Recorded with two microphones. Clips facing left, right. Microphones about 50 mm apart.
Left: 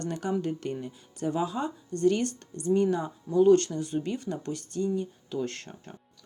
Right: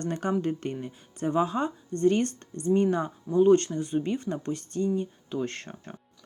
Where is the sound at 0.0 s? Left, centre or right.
Right.